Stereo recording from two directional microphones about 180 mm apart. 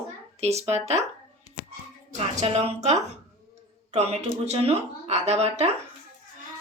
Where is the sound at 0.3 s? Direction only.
35° right (ahead or behind).